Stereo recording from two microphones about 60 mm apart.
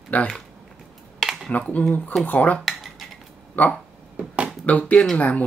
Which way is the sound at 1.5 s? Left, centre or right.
Left.